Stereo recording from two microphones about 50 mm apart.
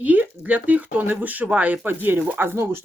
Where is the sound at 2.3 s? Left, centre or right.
Right.